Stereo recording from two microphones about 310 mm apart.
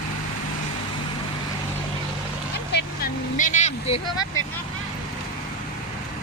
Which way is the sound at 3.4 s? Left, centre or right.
Left.